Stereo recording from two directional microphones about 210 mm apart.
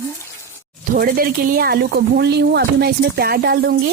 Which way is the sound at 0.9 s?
45° right (ahead or behind).